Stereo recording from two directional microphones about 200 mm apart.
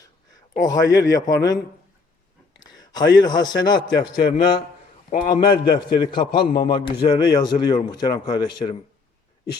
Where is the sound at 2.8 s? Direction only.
20° left (ahead or behind).